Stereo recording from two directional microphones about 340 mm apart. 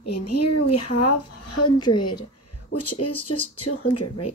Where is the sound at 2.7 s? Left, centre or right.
Left.